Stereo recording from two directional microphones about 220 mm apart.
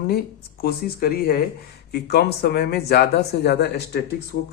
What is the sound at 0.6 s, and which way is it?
Speech, 45° left (ahead or behind).